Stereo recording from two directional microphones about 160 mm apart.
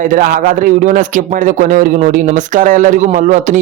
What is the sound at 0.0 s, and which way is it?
Speech, 55° right (ahead or behind).